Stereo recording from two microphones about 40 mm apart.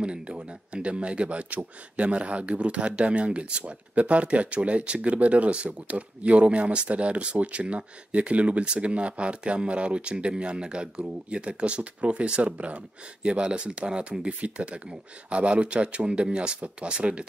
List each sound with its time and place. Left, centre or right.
0.0 s speech: right
13.2 s speech: right